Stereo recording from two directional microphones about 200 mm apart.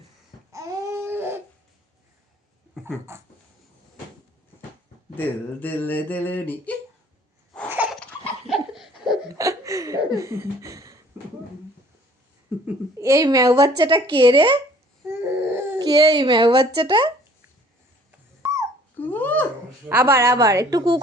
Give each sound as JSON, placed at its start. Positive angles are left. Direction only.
{"t": 0.5, "sound": "baby cry", "side_deg": -15}
{"t": 3.1, "sound": "a woman's voice", "side_deg": -15}
{"t": 5.1, "sound": "a sound", "side_deg": 10}
{"t": 8.4, "sound": "laughter", "side_deg": 0}
{"t": 9.4, "sound": "laughter", "side_deg": -15}
{"t": 10.2, "sound": "a sound", "side_deg": -15}
{"t": 12.6, "sound": "a woman's voice", "side_deg": -15}
{"t": 15.1, "sound": "speech", "side_deg": -10}
{"t": 18.4, "sound": "a sound", "side_deg": -10}
{"t": 18.9, "sound": "babbling", "side_deg": 10}
{"t": 19.9, "sound": "a woman's voice", "side_deg": -10}